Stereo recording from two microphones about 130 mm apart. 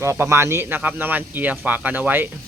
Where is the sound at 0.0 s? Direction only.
20° right (ahead or behind).